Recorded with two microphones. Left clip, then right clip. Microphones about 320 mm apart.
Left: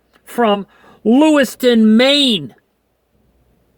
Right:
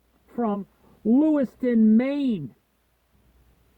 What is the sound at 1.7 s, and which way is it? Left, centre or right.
Speech, centre.